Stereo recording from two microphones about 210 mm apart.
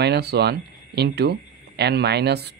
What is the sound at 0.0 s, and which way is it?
A man's voice, 50° right (ahead or behind).